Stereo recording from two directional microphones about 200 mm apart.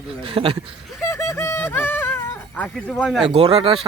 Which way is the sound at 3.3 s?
30° right (ahead or behind).